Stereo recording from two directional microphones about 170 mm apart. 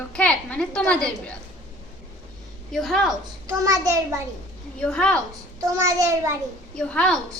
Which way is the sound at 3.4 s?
20° right (ahead or behind).